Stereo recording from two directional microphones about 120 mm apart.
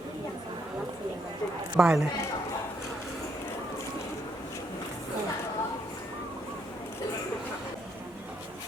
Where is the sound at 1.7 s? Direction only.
5° right (ahead or behind).